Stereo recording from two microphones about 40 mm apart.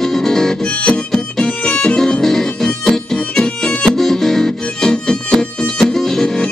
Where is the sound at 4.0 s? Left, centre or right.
Centre.